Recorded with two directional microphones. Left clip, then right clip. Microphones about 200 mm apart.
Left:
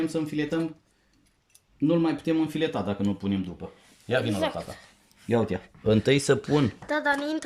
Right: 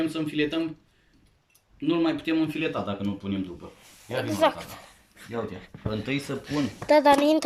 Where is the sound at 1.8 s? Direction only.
30° left (ahead or behind).